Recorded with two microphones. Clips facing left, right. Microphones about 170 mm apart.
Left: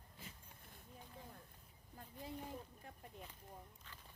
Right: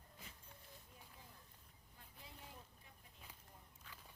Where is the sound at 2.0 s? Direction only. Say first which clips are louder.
Left 11 dB; 50° left (ahead or behind).